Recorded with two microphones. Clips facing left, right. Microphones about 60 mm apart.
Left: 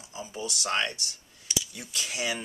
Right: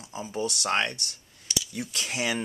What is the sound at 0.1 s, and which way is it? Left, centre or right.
Speech, right.